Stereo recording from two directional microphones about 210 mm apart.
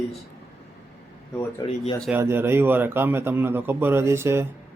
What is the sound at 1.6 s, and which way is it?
Speech, 20° left (ahead or behind).